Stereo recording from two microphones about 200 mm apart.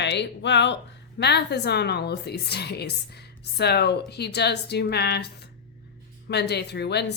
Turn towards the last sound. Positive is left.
turn(degrees=55)  # may be behind; listen again after turning